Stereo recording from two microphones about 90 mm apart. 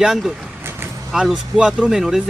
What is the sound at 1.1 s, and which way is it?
Speech, 5° right (ahead or behind).